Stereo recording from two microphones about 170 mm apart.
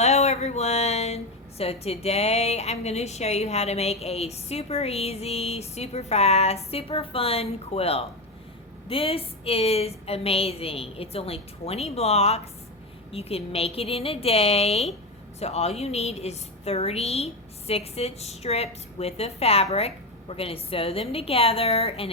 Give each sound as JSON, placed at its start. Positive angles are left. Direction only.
{"t": 0.0, "sound": "speech", "side_deg": 40}